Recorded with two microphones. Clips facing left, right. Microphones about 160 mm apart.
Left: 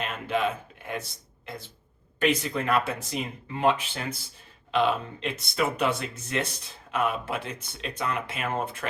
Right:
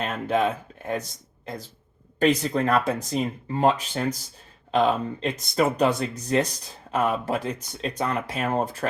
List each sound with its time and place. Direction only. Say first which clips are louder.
0.0 s speech: right 4 dB; 40° right (ahead or behind)
2.1 s speech: right 4 dB; 40° right (ahead or behind)